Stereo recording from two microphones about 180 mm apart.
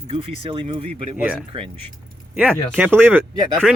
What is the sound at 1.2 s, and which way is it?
Speech, 5° right (ahead or behind).